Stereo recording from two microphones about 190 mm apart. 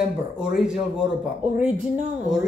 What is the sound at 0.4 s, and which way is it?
Speech, 5° right (ahead or behind).